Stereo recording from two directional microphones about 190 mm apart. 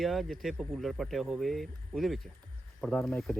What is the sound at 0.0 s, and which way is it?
A man's voice, centre (ahead or behind).